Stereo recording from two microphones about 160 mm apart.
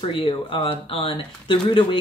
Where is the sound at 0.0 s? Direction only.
35° left (ahead or behind).